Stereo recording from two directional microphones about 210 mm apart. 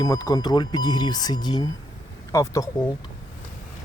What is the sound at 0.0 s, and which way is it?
Speech, 20° left (ahead or behind).